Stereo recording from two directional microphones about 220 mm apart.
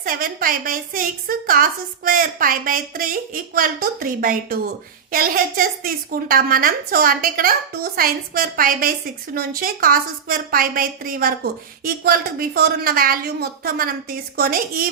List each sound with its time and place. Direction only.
0.0 s a woman's voice: 40° right (ahead or behind)